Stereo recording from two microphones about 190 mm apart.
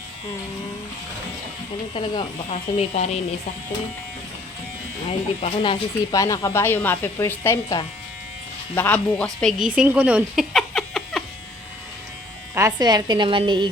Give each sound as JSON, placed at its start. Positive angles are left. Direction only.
{"t": 1.9, "sound": "speech", "side_deg": 25}
{"t": 5.4, "sound": "speech", "side_deg": 25}
{"t": 12.5, "sound": "speech", "side_deg": -20}